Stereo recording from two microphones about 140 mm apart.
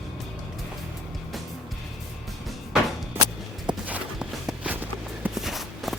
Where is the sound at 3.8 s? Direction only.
10° right (ahead or behind).